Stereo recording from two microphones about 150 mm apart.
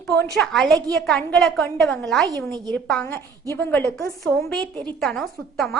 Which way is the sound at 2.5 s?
25° right (ahead or behind).